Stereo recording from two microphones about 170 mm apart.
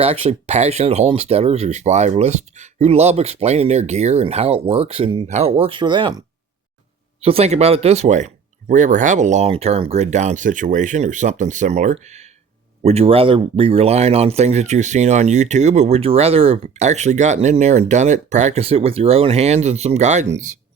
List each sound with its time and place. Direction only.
0.0 s speech: 35° right (ahead or behind)
7.2 s speech: 35° right (ahead or behind)